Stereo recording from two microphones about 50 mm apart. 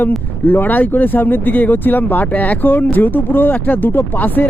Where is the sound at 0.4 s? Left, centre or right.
Left.